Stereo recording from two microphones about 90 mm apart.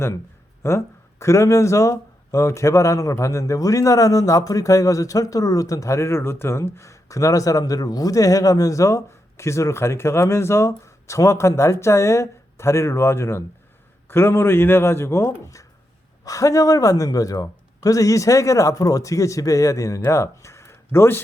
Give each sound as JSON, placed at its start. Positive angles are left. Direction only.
{"t": 0.6, "sound": "a man's voice", "side_deg": 30}